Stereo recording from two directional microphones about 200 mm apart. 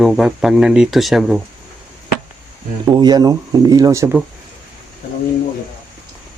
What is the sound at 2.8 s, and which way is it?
Speech, 20° right (ahead or behind).